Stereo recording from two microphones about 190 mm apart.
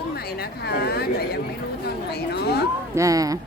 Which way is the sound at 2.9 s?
15° right (ahead or behind).